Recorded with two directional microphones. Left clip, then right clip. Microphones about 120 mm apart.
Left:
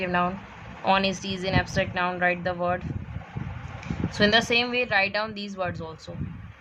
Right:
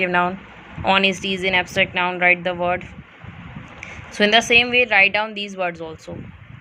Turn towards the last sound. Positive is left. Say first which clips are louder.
# right 6 dB
turn(degrees=-25)  # may be behind; listen again after turning